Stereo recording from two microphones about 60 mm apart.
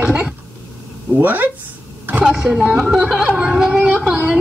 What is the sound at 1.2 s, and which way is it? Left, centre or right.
A woman's voice, right.